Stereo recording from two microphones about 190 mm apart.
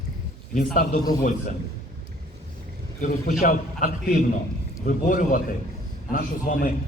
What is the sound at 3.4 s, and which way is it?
A man's voice, 45° left (ahead or behind).